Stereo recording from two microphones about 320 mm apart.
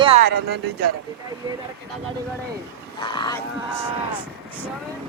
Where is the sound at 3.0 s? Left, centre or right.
Centre.